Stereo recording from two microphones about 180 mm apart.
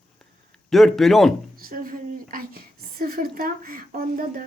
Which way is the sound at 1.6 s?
50° right (ahead or behind).